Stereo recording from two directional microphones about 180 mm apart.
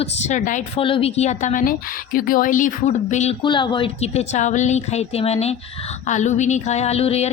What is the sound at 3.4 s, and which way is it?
A woman's voice, 25° left (ahead or behind).